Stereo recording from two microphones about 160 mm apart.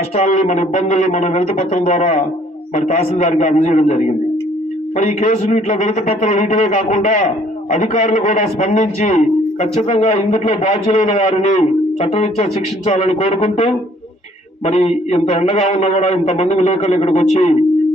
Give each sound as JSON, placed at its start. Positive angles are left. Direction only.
{"t": 0.2, "sound": "a man's voice", "side_deg": 50}